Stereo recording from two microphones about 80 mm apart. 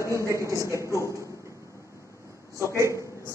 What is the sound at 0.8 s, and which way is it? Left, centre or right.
Speech, left.